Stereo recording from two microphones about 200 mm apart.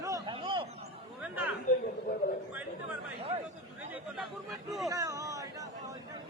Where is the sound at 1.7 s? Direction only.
40° left (ahead or behind).